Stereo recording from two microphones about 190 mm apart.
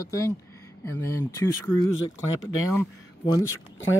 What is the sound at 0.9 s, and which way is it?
Speech, 15° left (ahead or behind).